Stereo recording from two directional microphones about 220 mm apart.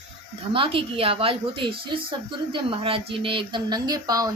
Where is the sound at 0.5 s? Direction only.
25° right (ahead or behind).